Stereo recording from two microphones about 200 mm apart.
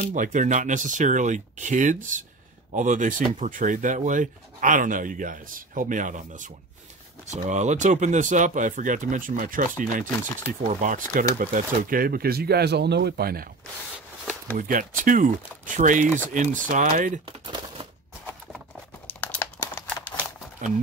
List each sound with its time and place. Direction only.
0.0 s speech: 40° right (ahead or behind)
14.6 s speech: 40° right (ahead or behind)
19.2 s crumpling: 10° left (ahead or behind)
20.6 s speech: 40° right (ahead or behind)